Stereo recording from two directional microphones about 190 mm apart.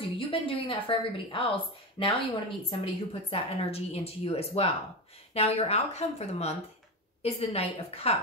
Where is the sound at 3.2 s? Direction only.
30° left (ahead or behind).